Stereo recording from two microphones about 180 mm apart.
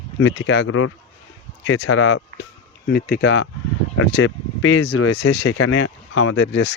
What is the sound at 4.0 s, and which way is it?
Speech, 90° left.